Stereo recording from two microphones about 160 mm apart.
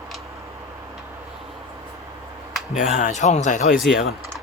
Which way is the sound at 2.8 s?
50° left (ahead or behind).